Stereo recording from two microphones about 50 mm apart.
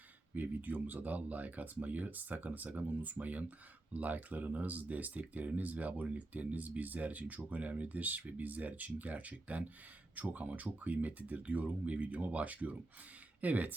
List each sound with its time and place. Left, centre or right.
0.3 s speech: right